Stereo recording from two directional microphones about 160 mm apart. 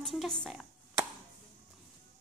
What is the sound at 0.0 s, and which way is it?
Speech, centre (ahead or behind).